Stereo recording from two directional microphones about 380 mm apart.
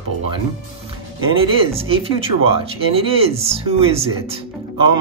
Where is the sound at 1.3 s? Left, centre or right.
Centre.